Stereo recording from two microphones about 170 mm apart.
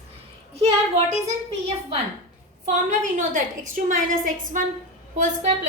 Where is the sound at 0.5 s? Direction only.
40° right (ahead or behind).